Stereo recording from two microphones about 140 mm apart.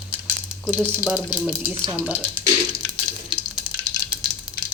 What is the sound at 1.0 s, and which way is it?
Speech, 10° right (ahead or behind).